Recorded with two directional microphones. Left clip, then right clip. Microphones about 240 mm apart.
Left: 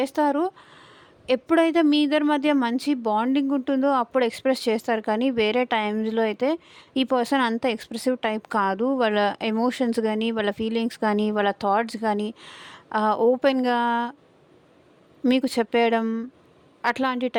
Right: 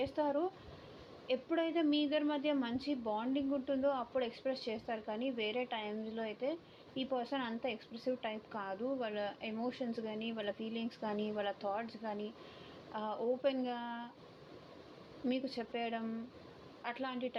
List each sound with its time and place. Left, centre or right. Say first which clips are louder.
0.0 s a woman's voice: left 13 dB; left
15.3 s a woman's voice: left 17 dB; left